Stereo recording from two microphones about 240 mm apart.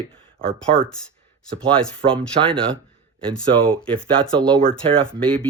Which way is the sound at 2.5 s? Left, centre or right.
Centre.